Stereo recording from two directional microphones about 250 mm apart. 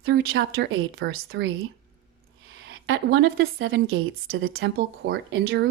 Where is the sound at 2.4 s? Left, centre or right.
Right.